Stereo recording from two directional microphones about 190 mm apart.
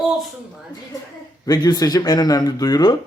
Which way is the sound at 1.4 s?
20° left (ahead or behind).